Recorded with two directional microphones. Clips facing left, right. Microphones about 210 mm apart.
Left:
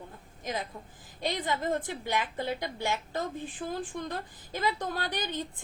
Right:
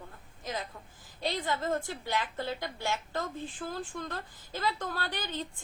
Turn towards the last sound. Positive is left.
turn(degrees=15)  # may be behind; listen again after turning